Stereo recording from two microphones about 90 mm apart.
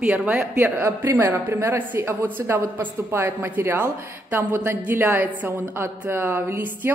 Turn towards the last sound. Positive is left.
turn(degrees=-25)  # may be behind; listen again after turning